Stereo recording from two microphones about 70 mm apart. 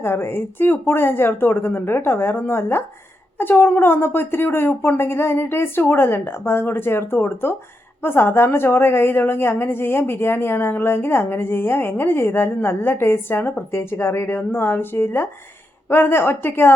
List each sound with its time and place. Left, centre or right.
0.0 s a woman's voice: left